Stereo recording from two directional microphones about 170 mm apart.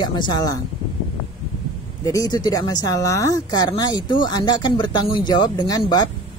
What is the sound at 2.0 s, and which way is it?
Speech, 20° left (ahead or behind).